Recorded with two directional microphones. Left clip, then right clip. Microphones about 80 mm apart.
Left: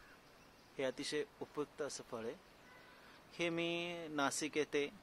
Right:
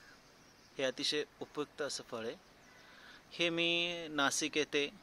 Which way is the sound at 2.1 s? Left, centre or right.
Centre.